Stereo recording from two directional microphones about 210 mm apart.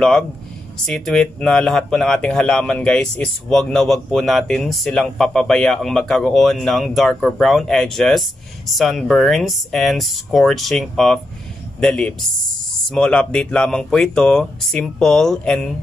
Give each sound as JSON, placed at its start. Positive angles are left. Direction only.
{"t": 0.8, "sound": "speech", "side_deg": 5}